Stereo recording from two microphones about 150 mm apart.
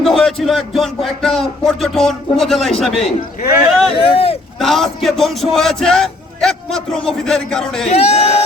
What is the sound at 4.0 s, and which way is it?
Speech, 40° left (ahead or behind).